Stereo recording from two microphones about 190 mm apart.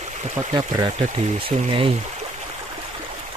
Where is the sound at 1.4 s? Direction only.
30° right (ahead or behind).